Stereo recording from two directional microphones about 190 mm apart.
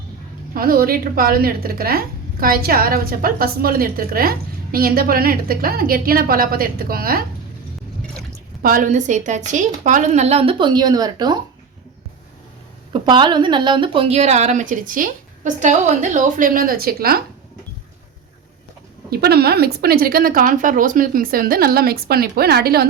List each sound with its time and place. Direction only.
0.5 s a woman's voice: 50° right (ahead or behind)
8.6 s speech: 45° right (ahead or behind); by 11.3 s 20° right (ahead or behind)
12.9 s speech: 25° right (ahead or behind); by 17.2 s 50° right (ahead or behind)
19.1 s a woman's voice: 55° right (ahead or behind)